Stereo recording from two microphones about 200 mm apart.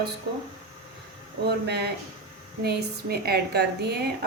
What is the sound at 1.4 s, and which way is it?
A woman's voice, 55° right (ahead or behind).